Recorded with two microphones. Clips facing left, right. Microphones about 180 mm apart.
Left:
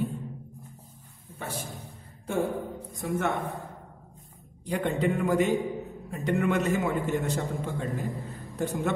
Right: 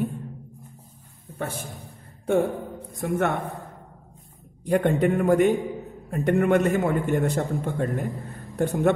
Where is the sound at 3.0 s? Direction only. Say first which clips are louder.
Right 4 dB; 60° right (ahead or behind).